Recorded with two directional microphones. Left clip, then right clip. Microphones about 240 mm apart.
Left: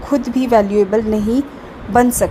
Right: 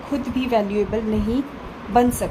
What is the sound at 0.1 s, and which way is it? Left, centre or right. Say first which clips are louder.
A woman's voice: left 8 dB; left.